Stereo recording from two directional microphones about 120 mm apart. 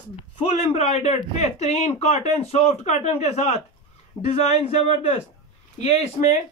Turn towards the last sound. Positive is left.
turn(degrees=70)  # may be behind; listen again after turning